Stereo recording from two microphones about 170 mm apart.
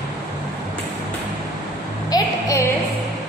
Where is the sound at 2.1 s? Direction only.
20° left (ahead or behind).